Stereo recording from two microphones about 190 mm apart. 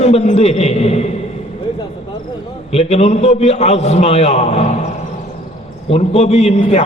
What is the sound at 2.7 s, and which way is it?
A man's voice, 35° left (ahead or behind).